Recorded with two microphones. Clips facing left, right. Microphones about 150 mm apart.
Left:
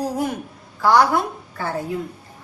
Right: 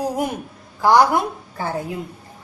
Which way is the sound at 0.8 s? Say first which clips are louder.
Right 1 dB; 15° right (ahead or behind).